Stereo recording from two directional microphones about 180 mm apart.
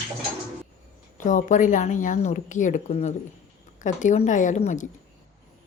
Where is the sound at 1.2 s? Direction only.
45° left (ahead or behind).